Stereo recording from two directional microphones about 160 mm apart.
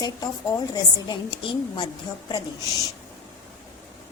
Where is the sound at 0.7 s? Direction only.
30° left (ahead or behind).